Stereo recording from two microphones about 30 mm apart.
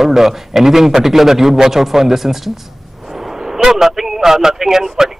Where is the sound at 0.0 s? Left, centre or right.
Centre.